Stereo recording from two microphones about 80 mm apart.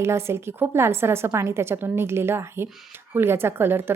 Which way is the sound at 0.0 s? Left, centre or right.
Right.